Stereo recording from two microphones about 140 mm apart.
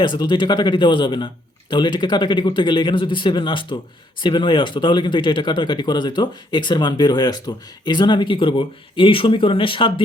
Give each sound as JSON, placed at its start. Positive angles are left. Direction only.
{"t": 0.0, "sound": "speech", "side_deg": 35}